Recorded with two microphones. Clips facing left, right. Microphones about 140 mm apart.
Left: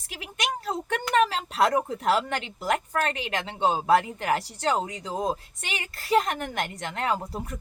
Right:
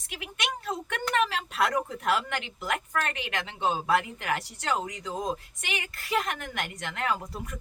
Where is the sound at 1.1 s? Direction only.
35° left (ahead or behind).